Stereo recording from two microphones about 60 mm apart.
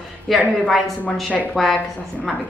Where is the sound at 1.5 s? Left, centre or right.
Centre.